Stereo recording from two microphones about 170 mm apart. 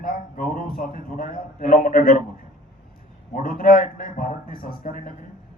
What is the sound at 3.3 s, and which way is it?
Speech, 55° left (ahead or behind).